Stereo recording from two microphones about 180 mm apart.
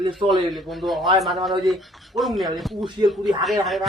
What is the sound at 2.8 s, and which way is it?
Speech, 25° right (ahead or behind).